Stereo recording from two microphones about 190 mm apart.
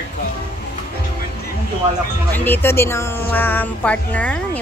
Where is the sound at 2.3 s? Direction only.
10° left (ahead or behind).